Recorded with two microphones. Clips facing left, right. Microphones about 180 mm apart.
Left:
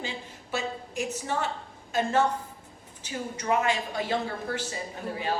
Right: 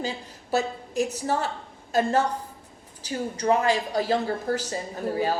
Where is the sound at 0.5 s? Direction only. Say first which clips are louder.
Right 7 dB; 40° right (ahead or behind).